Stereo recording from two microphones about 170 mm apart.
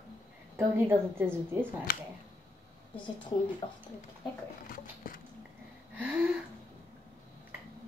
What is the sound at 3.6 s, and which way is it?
Speech, 30° left (ahead or behind).